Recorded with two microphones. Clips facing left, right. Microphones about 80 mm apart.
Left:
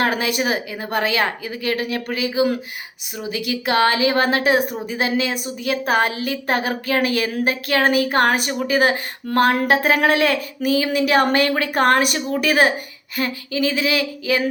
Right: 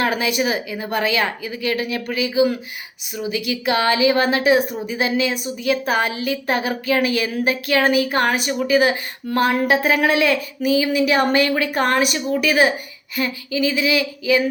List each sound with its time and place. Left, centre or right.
0.0 s a woman's voice: left